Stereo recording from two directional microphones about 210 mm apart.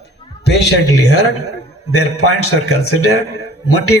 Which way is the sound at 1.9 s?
90° left.